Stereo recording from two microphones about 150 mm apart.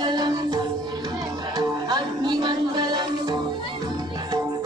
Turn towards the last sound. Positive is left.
turn(degrees=-30)  # may be behind; listen again after turning